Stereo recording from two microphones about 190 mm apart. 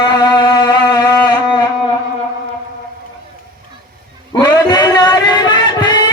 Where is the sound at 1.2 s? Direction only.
25° left (ahead or behind).